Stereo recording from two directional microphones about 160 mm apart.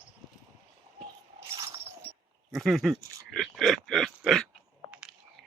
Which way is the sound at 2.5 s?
Centre (ahead or behind).